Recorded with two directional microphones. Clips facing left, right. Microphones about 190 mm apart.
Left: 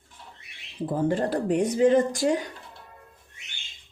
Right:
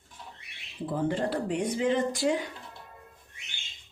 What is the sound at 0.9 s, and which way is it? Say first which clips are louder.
Speech: left 4 dB; 45° left (ahead or behind).